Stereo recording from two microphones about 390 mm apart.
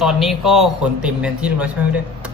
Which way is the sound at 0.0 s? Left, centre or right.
Centre.